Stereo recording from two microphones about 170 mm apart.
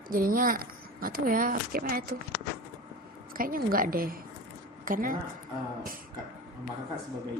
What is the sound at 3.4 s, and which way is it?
A woman's voice, 55° right (ahead or behind).